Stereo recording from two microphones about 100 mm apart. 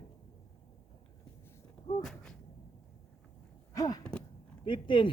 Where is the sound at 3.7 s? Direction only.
35° left (ahead or behind).